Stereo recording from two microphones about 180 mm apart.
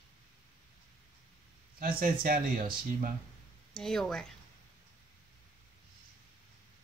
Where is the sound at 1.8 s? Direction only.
50° right (ahead or behind).